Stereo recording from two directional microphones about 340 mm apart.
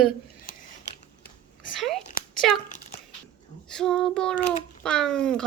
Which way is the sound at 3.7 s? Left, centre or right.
Centre.